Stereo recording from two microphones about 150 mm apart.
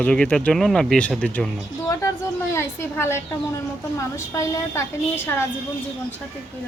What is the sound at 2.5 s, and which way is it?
A woman's voice, 15° left (ahead or behind).